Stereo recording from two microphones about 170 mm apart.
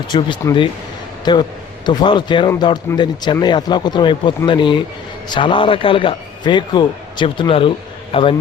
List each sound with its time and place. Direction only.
0.1 s a man's voice: 25° left (ahead or behind)